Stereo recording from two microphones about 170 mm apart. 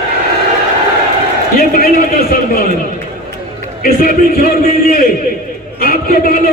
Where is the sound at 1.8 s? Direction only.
60° left (ahead or behind).